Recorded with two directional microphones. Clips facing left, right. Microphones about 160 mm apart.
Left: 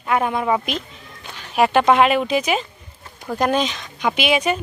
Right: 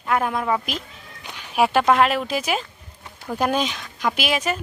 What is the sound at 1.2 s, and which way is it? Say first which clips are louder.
Speech: left 2 dB; 15° right (ahead or behind).